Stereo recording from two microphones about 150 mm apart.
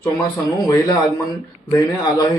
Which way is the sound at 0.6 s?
25° left (ahead or behind).